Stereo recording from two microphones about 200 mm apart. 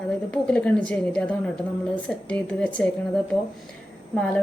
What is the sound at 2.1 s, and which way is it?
Speech, 5° left (ahead or behind).